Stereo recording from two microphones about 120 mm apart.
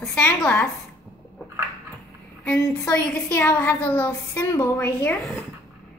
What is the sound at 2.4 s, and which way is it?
A woman's voice, 15° left (ahead or behind).